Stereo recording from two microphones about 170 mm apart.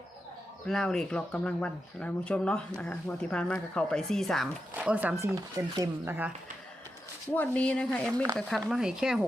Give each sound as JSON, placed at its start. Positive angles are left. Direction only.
{"t": 0.7, "sound": "speech", "side_deg": 5}
{"t": 4.7, "sound": "speech", "side_deg": -10}
{"t": 5.2, "sound": "speech", "side_deg": -20}
{"t": 7.3, "sound": "speech", "side_deg": 10}